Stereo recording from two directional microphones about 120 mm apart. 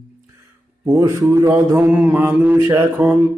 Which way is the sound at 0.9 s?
25° right (ahead or behind).